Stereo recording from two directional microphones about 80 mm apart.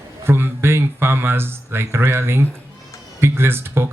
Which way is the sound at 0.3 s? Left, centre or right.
Right.